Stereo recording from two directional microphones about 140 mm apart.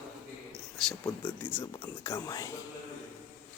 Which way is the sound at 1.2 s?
15° left (ahead or behind).